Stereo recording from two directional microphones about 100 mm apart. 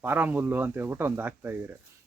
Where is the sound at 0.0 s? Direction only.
20° right (ahead or behind).